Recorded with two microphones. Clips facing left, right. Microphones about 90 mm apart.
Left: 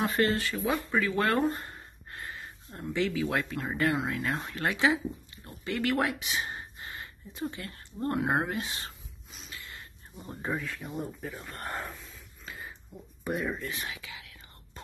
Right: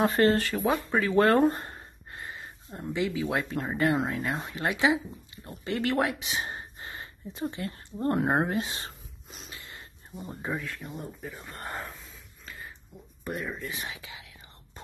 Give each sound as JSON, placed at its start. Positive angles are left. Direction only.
{"t": 0.0, "sound": "speech", "side_deg": -40}
{"t": 0.7, "sound": "speech", "side_deg": -35}
{"t": 9.5, "sound": "a sound", "side_deg": -25}
{"t": 10.1, "sound": "speech", "side_deg": -5}
{"t": 12.4, "sound": "a sound", "side_deg": 5}
{"t": 13.2, "sound": "speech", "side_deg": 5}
{"t": 13.7, "sound": "whispering", "side_deg": -25}